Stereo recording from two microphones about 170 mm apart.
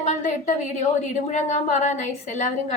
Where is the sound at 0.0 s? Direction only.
45° left (ahead or behind).